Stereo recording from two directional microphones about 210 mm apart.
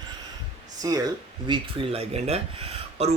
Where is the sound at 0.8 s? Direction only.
15° right (ahead or behind).